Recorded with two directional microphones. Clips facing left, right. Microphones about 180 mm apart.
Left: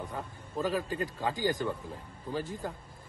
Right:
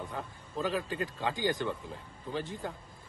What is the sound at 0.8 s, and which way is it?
Speech, 40° left (ahead or behind).